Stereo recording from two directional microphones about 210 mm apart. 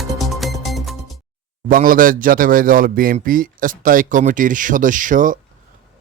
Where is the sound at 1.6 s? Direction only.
40° right (ahead or behind).